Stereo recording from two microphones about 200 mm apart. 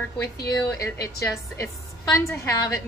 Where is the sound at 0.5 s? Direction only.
15° left (ahead or behind).